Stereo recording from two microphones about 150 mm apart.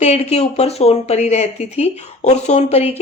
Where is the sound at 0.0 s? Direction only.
45° left (ahead or behind).